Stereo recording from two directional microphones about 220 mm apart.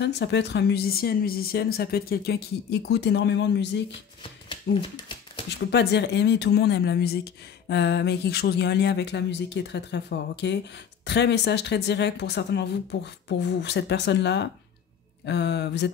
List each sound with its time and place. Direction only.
0.0 s speech: 50° left (ahead or behind)
4.2 s a sound: 20° left (ahead or behind)
5.5 s speech: 50° left (ahead or behind)